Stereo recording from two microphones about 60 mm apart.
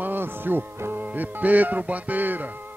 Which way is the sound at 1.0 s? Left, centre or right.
Right.